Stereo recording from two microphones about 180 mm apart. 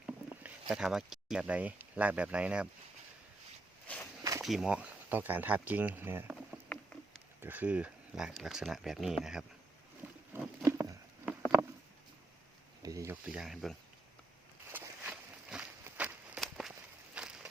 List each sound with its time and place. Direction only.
0.0 s speech: 10° right (ahead or behind)
3.8 s walk: 10° left (ahead or behind)
4.2 s a sound: 20° right (ahead or behind)
4.4 s speech: centre (ahead or behind)
6.7 s rowboat: 5° left (ahead or behind)
7.4 s speech: 10° right (ahead or behind)
10.3 s a sound: 10° right (ahead or behind)
12.8 s speech: 20° right (ahead or behind); by 13.7 s centre (ahead or behind)
14.7 s walk: 10° right (ahead or behind)
17.2 s a sound: 5° right (ahead or behind)